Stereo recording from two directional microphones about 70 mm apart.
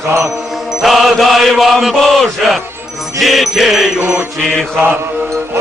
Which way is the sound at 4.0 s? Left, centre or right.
Right.